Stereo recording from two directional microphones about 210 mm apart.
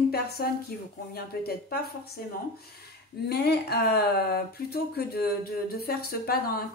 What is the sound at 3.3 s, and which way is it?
A woman's voice, 50° left (ahead or behind).